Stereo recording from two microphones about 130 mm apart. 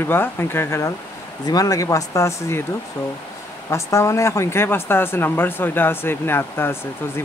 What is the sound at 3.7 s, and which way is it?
Speech, 20° left (ahead or behind).